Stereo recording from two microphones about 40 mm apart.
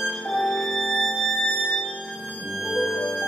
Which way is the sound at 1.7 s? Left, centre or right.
Left.